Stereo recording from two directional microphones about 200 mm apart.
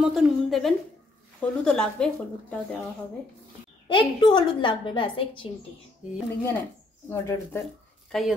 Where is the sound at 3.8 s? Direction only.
25° left (ahead or behind).